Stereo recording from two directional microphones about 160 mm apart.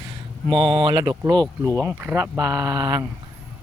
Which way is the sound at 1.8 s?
10° right (ahead or behind).